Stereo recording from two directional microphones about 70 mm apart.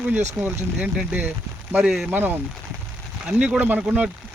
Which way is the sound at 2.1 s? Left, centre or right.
Right.